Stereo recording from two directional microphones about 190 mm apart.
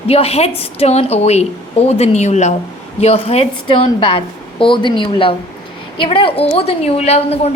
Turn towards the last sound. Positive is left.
turn(degrees=35)  # may be behind; listen again after turning